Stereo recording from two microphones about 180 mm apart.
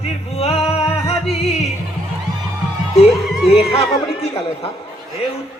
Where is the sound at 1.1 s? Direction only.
35° left (ahead or behind).